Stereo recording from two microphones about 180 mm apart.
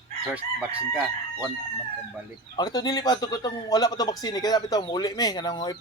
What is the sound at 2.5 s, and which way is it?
Speech, 20° left (ahead or behind).